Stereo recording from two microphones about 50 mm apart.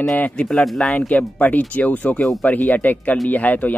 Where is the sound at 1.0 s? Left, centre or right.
Left.